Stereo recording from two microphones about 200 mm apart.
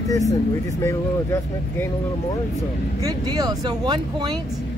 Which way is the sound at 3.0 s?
20° right (ahead or behind).